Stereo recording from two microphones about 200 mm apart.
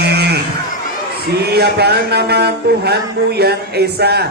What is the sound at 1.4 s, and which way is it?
Speech, 55° right (ahead or behind).